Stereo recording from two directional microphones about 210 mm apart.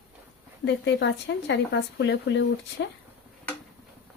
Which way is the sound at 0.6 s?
55° left (ahead or behind).